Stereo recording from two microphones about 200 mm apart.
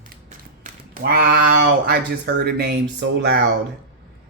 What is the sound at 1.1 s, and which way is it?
Speech, 45° right (ahead or behind).